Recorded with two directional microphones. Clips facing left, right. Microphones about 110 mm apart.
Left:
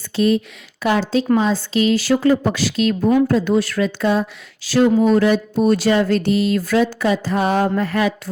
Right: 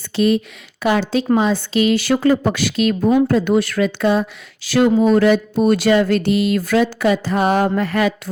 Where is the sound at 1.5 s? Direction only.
65° right (ahead or behind).